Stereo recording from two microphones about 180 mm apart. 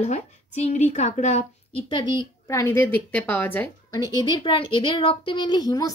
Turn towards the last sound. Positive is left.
turn(degrees=20)  # may be behind; listen again after turning